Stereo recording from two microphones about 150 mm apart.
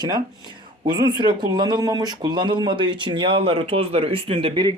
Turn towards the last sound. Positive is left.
turn(degrees=-35)  # may be behind; listen again after turning